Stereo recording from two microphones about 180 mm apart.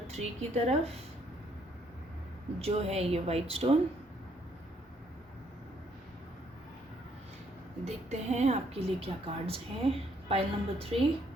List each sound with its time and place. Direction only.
0.1 s a woman's voice: 35° right (ahead or behind)
2.6 s a woman's voice: 35° right (ahead or behind)
7.9 s a woman's voice: 40° right (ahead or behind)